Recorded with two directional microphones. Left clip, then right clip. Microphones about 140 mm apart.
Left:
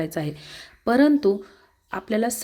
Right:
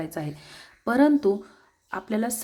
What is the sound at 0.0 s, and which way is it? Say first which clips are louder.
Speech: left 5 dB; 20° left (ahead or behind).